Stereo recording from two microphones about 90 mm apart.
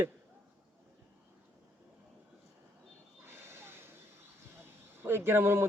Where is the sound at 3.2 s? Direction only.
25° right (ahead or behind).